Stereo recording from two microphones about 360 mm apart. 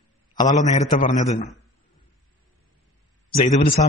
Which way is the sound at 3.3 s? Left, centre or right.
Centre.